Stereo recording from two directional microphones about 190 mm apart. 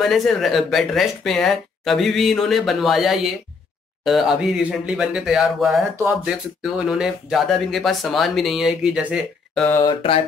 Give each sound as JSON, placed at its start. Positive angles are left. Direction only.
{"t": 0.0, "sound": "speech", "side_deg": 0}
{"t": 5.9, "sound": "speech", "side_deg": -10}
{"t": 9.8, "sound": "a sound", "side_deg": 30}